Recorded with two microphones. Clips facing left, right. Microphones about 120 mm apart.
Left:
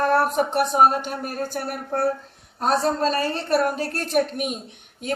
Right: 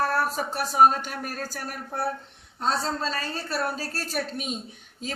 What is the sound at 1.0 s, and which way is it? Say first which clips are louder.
Speech: left 5 dB; 45° left (ahead or behind).